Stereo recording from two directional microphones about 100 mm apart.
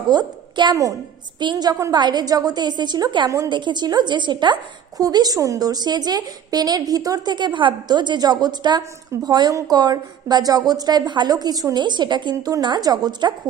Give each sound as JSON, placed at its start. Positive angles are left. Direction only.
{"t": 0.1, "sound": "a woman's voice", "side_deg": -50}